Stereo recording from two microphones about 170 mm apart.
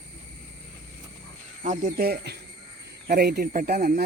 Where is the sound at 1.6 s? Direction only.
50° right (ahead or behind).